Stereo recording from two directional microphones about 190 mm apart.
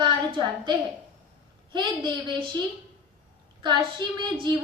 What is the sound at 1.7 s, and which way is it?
Speech, 25° right (ahead or behind).